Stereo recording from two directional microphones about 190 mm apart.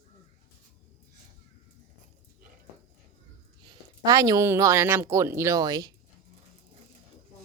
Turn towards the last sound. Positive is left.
turn(degrees=-20)  # may be behind; listen again after turning